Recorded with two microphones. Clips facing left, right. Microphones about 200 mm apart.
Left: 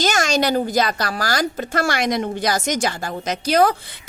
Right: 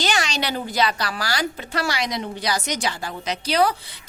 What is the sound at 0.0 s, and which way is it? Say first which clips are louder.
A woman's voice: left 6 dB; 45° left (ahead or behind).